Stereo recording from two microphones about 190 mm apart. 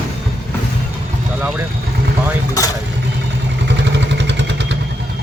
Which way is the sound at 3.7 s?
65° right (ahead or behind).